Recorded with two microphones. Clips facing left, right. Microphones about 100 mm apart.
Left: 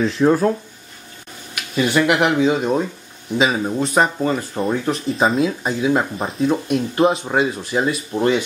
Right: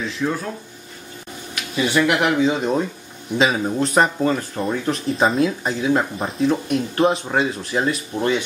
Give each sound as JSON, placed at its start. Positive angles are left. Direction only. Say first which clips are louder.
{"t": 0.0, "sound": "speech", "louder": "left 9 dB", "side_deg": 40}
{"t": 1.8, "sound": "speech", "louder": "left 2 dB", "side_deg": 5}